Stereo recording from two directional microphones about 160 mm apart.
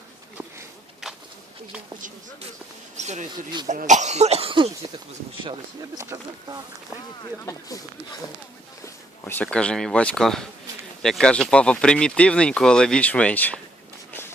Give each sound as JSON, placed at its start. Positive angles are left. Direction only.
{"t": 3.0, "sound": "cough", "side_deg": -45}
{"t": 6.0, "sound": "speech", "side_deg": -20}
{"t": 8.8, "sound": "speech", "side_deg": 10}
{"t": 14.1, "sound": "a sound", "side_deg": 15}